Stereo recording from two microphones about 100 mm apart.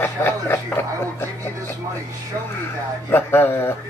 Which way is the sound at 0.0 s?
20° left (ahead or behind).